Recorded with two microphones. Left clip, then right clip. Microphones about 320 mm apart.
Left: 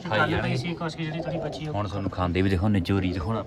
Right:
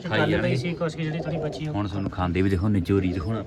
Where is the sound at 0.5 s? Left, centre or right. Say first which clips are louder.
Right 3 dB; centre.